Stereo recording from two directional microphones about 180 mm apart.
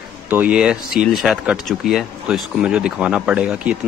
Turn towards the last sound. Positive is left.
turn(degrees=-5)  # may be behind; listen again after turning